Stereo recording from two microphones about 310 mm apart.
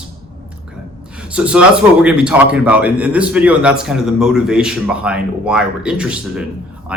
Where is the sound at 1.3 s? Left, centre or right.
Centre.